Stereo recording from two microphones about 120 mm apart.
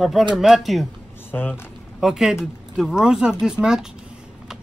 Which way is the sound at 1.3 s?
15° left (ahead or behind).